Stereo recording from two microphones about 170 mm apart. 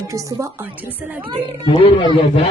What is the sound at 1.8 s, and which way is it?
Speech, 35° left (ahead or behind).